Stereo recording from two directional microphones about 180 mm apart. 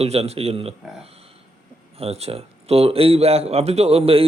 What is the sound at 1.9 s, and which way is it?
Speech, 35° right (ahead or behind).